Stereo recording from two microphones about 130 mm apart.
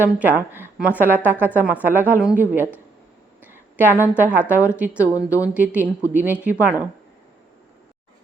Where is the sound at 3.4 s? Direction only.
15° right (ahead or behind).